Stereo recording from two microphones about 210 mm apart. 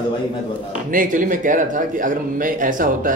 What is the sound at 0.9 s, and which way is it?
Speech, 40° right (ahead or behind).